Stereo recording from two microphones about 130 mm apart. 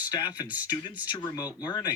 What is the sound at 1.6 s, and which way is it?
Speech, 30° left (ahead or behind).